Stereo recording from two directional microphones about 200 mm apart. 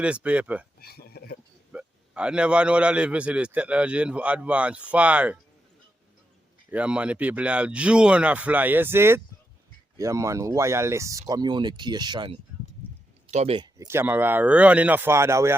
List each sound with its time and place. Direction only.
0.0 s a man's voice: 5° right (ahead or behind)
0.8 s a sound: 50° left (ahead or behind)
1.7 s a man's voice: 5° right (ahead or behind)
6.7 s a man's voice: 5° right (ahead or behind); by 13.7 s 30° right (ahead or behind)
13.7 s a man's voice: 15° right (ahead or behind)